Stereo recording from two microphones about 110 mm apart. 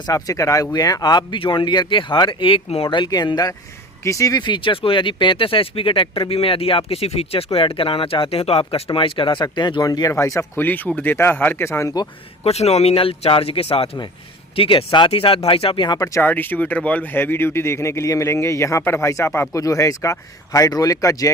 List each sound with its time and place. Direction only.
0.0 s speech: 30° left (ahead or behind); by 2.6 s 50° left (ahead or behind)
2.6 s speech: 60° left (ahead or behind); by 11.9 s 25° left (ahead or behind)
12.4 s speech: 75° left (ahead or behind); by 16.0 s 50° left (ahead or behind)
16.2 s speech: 15° left (ahead or behind)